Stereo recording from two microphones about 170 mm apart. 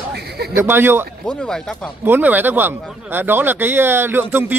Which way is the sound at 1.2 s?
5° left (ahead or behind).